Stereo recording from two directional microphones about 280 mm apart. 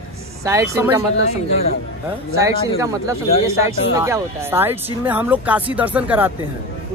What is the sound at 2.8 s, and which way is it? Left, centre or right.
Speech, centre.